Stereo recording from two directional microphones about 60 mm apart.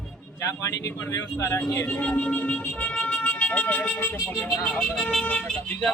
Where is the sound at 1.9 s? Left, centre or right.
Left.